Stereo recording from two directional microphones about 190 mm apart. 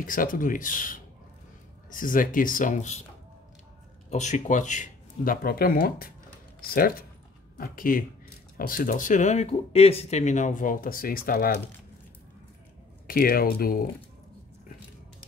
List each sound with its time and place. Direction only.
0.0 s speech: 45° left (ahead or behind)
4.1 s speech: 40° left (ahead or behind)
13.0 s speech: 50° left (ahead or behind)